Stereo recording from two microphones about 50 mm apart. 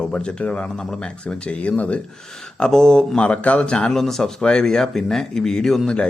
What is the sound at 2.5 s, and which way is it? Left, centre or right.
Speech, centre.